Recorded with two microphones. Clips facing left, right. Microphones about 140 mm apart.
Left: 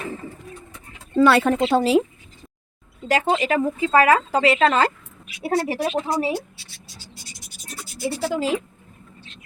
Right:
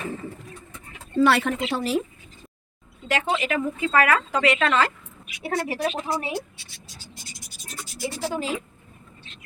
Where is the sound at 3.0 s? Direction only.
35° left (ahead or behind).